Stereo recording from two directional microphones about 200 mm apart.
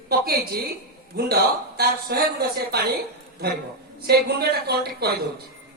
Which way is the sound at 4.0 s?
50° right (ahead or behind).